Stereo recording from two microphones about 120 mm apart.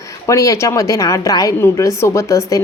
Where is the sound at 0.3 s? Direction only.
25° left (ahead or behind).